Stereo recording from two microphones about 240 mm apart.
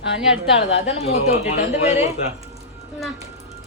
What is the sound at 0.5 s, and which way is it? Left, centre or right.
A woman's voice, left.